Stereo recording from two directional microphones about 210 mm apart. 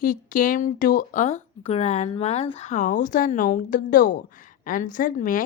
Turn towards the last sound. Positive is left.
turn(degrees=40)  # may be behind; listen again after turning